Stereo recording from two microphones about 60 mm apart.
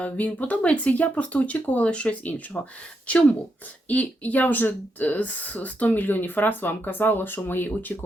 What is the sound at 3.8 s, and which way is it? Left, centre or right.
Speech, left.